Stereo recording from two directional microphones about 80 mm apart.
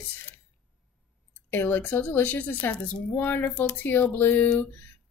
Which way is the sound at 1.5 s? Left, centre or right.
Left.